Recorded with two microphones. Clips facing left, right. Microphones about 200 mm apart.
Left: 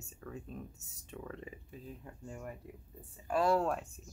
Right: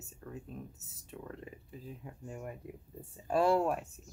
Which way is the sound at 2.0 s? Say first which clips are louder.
Right 3 dB; 15° right (ahead or behind).